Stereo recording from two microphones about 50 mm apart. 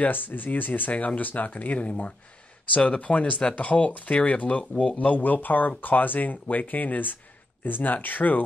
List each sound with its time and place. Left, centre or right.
0.0 s speech: left